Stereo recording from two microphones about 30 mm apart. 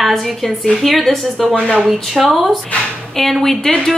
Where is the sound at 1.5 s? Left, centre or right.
Left.